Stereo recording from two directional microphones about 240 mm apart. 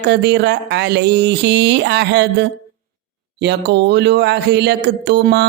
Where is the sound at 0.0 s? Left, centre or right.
Right.